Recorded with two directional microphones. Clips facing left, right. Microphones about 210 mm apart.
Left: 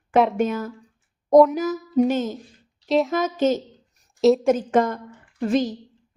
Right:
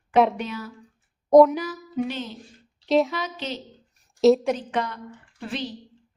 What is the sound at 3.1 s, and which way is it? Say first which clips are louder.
Music: left 11 dB; 45° left (ahead or behind).